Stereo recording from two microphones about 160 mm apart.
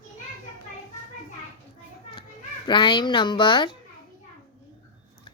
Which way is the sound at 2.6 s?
30° left (ahead or behind).